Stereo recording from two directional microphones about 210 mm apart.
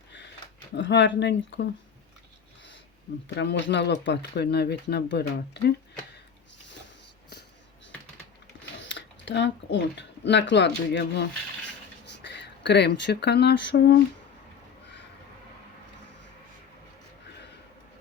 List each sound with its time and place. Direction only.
0.8 s speech: 60° left (ahead or behind)
3.2 s speech: 55° left (ahead or behind)
8.8 s speech: 60° left (ahead or behind)